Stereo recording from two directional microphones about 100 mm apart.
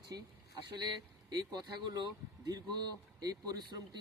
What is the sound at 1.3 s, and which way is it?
Speech, 45° right (ahead or behind).